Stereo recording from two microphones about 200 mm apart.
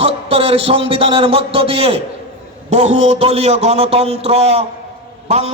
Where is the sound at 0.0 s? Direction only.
30° right (ahead or behind).